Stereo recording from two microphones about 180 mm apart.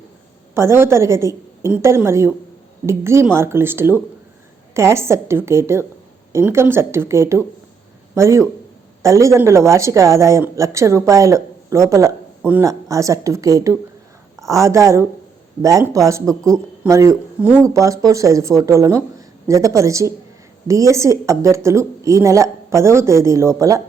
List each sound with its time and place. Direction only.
0.5 s speech: 15° right (ahead or behind)